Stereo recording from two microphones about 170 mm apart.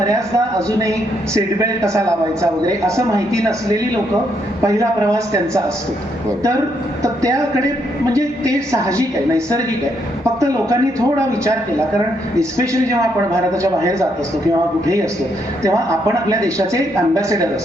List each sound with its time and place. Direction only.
0.0 s a man's voice: 20° right (ahead or behind)
7.0 s a man's voice: 20° right (ahead or behind)
15.6 s a man's voice: 20° right (ahead or behind)